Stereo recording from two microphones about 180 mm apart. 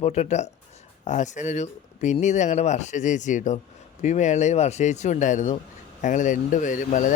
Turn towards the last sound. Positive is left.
turn(degrees=45)  # may be behind; listen again after turning